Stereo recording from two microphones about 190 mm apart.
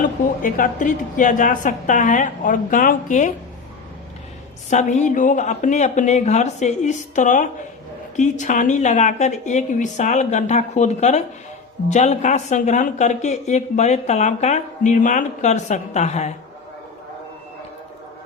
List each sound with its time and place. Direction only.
0.0 s a woman's voice: 45° left (ahead or behind)
4.7 s speech: 40° left (ahead or behind)